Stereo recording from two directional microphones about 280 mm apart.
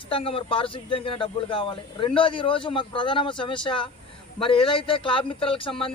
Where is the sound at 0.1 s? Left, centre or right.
Centre.